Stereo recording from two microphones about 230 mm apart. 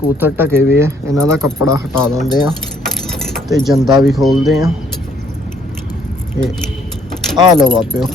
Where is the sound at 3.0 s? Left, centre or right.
Centre.